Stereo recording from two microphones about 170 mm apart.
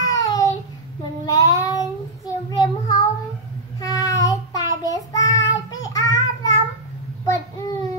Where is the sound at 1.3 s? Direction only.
20° left (ahead or behind).